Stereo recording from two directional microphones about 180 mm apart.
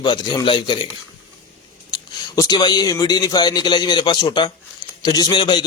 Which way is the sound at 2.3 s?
20° left (ahead or behind).